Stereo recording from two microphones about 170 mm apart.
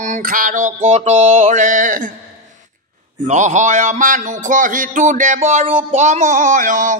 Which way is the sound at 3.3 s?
45° right (ahead or behind).